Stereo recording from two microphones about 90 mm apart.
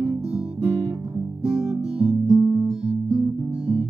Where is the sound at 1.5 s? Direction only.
10° right (ahead or behind).